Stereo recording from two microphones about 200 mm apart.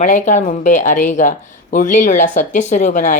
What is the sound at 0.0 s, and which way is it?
Speech, 35° left (ahead or behind).